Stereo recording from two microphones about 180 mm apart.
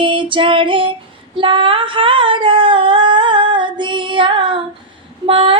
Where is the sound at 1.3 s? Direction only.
30° right (ahead or behind).